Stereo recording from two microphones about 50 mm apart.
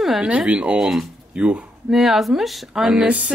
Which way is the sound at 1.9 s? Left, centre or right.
Centre.